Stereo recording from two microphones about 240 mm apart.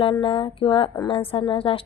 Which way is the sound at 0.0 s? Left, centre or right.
Left.